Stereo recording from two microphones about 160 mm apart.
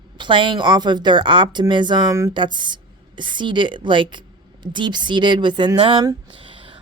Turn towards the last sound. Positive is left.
turn(degrees=-35)  # may be behind; listen again after turning